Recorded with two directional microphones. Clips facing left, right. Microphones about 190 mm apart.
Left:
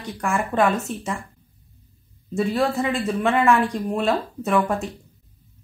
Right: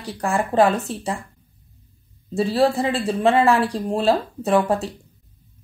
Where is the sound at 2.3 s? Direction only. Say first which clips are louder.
Right 3 dB; 30° right (ahead or behind).